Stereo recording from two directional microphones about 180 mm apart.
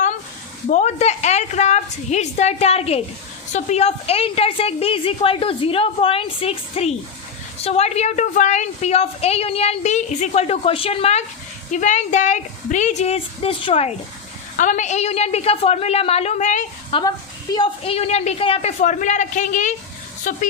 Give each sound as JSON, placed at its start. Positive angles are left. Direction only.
{"t": 0.7, "sound": "a woman's voice", "side_deg": 40}
{"t": 14.5, "sound": "a woman's voice", "side_deg": 45}
{"t": 17.5, "sound": "a woman's voice", "side_deg": 25}